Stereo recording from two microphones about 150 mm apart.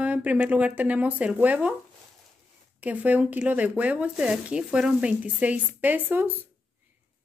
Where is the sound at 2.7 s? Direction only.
10° right (ahead or behind).